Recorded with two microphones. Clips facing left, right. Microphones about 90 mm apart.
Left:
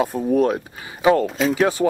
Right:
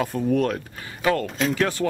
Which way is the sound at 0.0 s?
10° left (ahead or behind).